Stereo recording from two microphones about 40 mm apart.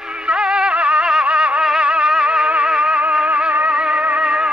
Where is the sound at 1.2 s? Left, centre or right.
Right.